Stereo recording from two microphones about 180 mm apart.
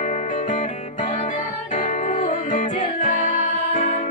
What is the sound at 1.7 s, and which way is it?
Music, 45° left (ahead or behind).